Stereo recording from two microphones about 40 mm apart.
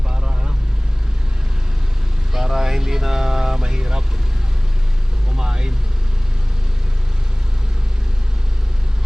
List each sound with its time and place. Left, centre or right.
0.1 s vehicle: centre
2.3 s vehicle: centre
5.4 s vehicle: centre